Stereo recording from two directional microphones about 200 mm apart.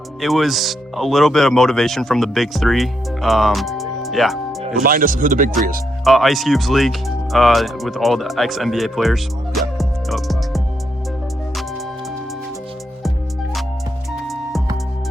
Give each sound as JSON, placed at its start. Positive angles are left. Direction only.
{"t": 0.2, "sound": "speech", "side_deg": 0}
{"t": 4.8, "sound": "speech", "side_deg": -45}
{"t": 6.1, "sound": "speech", "side_deg": 0}
{"t": 13.0, "sound": "music", "side_deg": 0}